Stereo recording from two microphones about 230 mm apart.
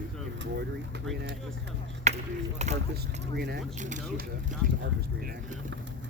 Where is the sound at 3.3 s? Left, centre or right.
Right.